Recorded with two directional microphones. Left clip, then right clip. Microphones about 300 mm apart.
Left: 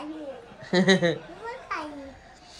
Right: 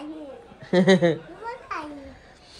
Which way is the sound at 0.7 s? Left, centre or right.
Centre.